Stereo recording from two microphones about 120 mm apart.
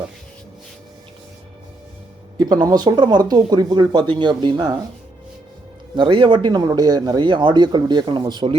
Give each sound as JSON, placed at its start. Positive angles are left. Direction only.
{"t": 2.4, "sound": "speech", "side_deg": -35}
{"t": 6.0, "sound": "speech", "side_deg": -45}